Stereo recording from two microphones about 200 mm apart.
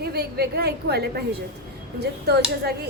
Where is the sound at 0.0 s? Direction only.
50° right (ahead or behind).